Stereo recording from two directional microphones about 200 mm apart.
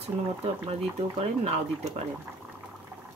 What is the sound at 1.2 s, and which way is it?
Speech, 30° right (ahead or behind).